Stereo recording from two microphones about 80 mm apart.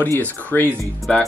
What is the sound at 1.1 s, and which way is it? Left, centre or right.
Speech, centre.